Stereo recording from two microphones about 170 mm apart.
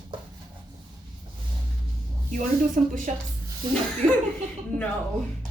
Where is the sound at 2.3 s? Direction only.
50° right (ahead or behind).